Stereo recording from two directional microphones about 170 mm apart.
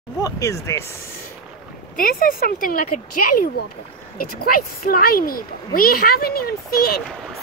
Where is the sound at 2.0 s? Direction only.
55° left (ahead or behind).